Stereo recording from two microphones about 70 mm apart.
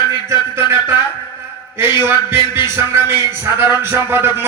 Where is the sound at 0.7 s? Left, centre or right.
Right.